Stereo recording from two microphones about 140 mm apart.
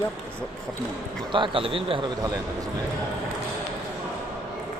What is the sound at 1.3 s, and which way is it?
Speech, 35° right (ahead or behind).